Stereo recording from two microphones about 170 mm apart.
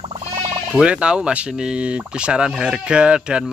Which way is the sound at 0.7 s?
5° right (ahead or behind).